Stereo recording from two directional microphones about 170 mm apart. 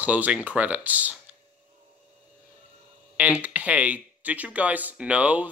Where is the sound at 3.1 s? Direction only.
10° right (ahead or behind).